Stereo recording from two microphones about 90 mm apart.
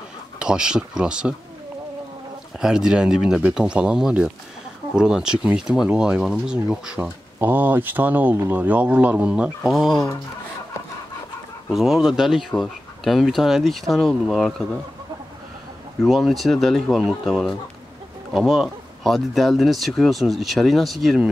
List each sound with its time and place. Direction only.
0.4 s speech: 10° right (ahead or behind)
2.6 s speech: 5° right (ahead or behind)
7.3 s speech: 20° right (ahead or behind); by 10.0 s centre (ahead or behind)
11.7 s speech: centre (ahead or behind)
16.0 s speech: centre (ahead or behind)